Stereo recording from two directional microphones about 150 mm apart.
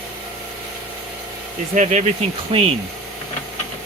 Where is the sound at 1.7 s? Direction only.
55° right (ahead or behind).